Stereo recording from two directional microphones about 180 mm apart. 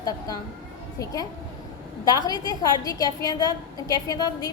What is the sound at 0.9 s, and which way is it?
A woman's voice, 20° left (ahead or behind).